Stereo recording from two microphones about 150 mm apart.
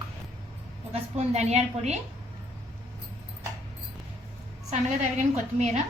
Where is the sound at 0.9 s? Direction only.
45° right (ahead or behind).